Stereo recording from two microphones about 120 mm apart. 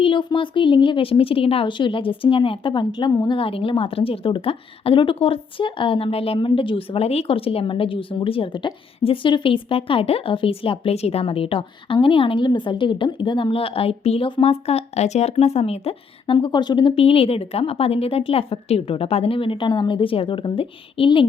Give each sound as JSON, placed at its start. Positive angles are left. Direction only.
{"t": 0.0, "sound": "a woman's voice", "side_deg": 45}